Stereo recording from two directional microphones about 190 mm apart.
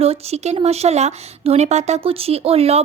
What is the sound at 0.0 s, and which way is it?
Speech, 35° right (ahead or behind).